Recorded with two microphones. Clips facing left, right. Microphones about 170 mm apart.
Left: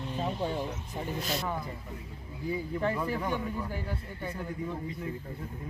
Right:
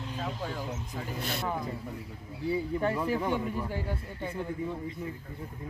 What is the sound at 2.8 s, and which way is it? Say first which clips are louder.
Speech: right 2 dB; 5° right (ahead or behind).